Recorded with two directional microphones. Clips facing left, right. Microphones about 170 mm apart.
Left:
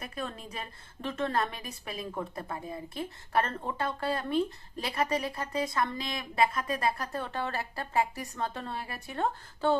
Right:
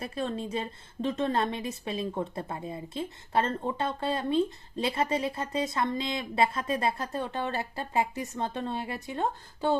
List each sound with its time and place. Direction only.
0.0 s a woman's voice: 30° right (ahead or behind)